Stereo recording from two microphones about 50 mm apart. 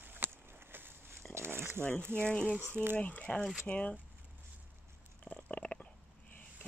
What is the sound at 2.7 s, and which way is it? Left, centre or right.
Speech, right.